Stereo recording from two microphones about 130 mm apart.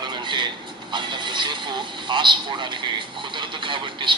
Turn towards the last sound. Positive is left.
turn(degrees=-40)  # may be behind; listen again after turning